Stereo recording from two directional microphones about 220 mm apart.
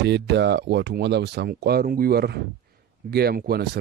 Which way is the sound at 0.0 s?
50° right (ahead or behind).